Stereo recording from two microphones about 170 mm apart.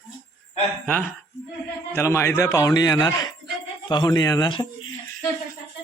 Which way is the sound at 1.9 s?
15° left (ahead or behind).